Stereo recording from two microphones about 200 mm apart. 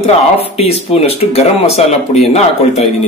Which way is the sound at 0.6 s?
30° left (ahead or behind).